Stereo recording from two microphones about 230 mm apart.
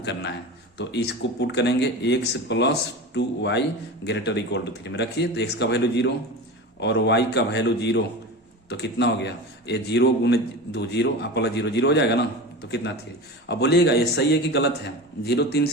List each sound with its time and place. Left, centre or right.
0.0 s a man's voice: left